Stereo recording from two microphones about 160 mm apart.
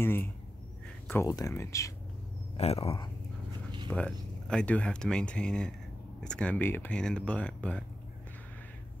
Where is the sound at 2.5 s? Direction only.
40° left (ahead or behind).